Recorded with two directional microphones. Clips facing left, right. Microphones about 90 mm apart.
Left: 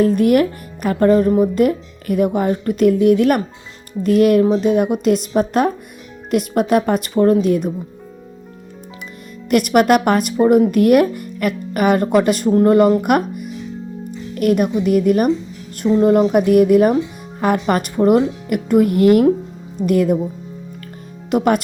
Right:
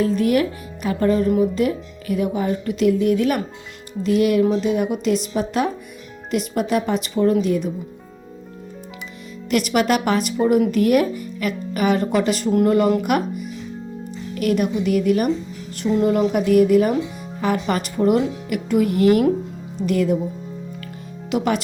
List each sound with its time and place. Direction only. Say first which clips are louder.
0.0 s speech: left 5 dB; 50° left (ahead or behind)
9.5 s speech: left 6 dB; 50° left (ahead or behind)
12.5 s speech: left 4 dB; 35° left (ahead or behind)
13.0 s speech: left 4 dB; 50° left (ahead or behind)
14.3 s speech: left 4 dB; 50° left (ahead or behind)
16.3 s speech: left 3 dB; 50° left (ahead or behind)
21.2 s speech: left 5 dB; 45° left (ahead or behind)